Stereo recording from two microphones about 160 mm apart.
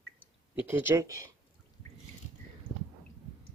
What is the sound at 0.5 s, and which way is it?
Speech, 15° right (ahead or behind).